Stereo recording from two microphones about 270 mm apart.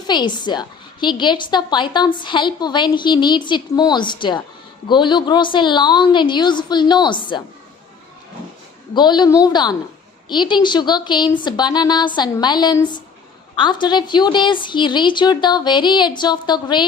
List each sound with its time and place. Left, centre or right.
0.1 s a woman's voice: centre
9.0 s a woman's voice: centre